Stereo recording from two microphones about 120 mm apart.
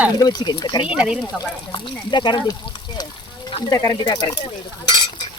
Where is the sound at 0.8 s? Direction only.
10° right (ahead or behind).